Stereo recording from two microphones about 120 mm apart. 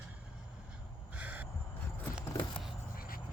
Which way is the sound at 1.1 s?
15° right (ahead or behind).